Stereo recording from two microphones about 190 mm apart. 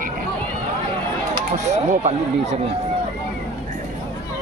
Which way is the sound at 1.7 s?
35° right (ahead or behind).